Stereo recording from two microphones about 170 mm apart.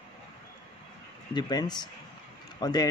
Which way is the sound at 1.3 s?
25° left (ahead or behind).